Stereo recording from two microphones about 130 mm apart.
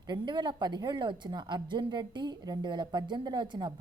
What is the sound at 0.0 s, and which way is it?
A woman's voice, 35° right (ahead or behind).